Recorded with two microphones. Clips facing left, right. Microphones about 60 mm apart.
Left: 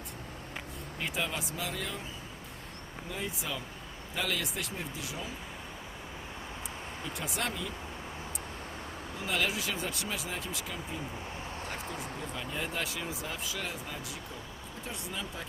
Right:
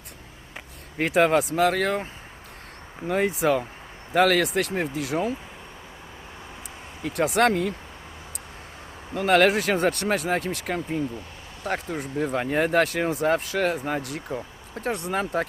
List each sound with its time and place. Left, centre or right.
0.9 s speech: right
3.1 s speech: right
7.0 s speech: right
9.1 s speech: right